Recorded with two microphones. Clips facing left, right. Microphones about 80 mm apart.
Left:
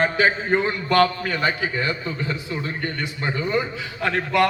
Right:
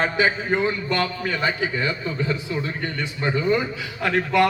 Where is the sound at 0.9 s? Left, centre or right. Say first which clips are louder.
Left 5 dB; left.